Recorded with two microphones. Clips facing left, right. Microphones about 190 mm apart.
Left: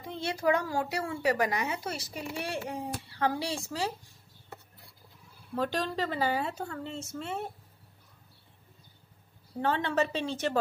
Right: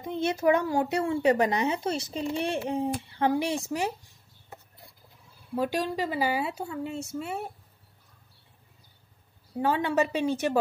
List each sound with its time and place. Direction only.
0.0 s a woman's voice: 20° right (ahead or behind)
5.5 s speech: 10° right (ahead or behind)
9.6 s speech: 10° right (ahead or behind)